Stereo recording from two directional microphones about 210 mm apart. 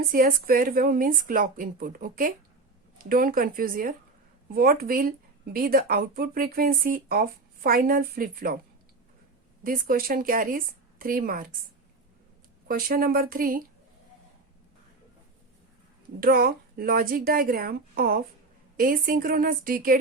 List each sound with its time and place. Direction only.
0.0 s speech: 45° right (ahead or behind)
9.6 s speech: 40° right (ahead or behind)
12.6 s speech: 45° right (ahead or behind)
16.2 s speech: 45° right (ahead or behind)